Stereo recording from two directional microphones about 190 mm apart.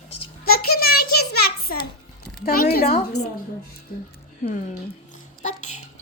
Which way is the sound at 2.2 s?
55° left (ahead or behind).